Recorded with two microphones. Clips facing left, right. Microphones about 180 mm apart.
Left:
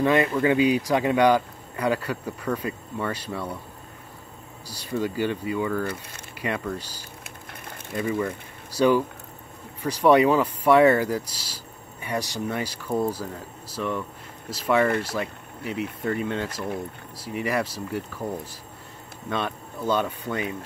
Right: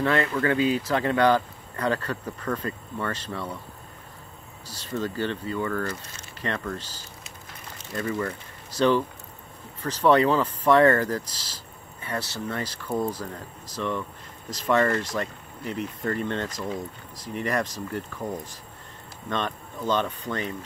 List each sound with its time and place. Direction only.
0.0 s speech: 15° left (ahead or behind)
4.6 s speech: 10° left (ahead or behind)
7.2 s a sound: 55° left (ahead or behind)
7.9 s speech: 10° left (ahead or behind)